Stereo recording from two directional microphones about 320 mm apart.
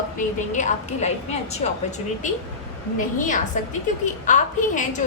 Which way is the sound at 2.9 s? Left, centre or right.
Left.